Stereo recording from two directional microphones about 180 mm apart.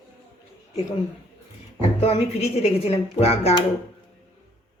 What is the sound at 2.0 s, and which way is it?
Speech, 35° left (ahead or behind).